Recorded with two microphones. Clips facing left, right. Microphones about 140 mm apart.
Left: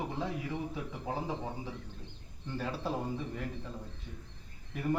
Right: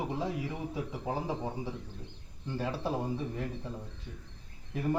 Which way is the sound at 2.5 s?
20° right (ahead or behind).